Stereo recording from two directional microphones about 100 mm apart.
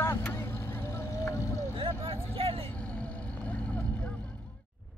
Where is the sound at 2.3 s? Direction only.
70° right (ahead or behind).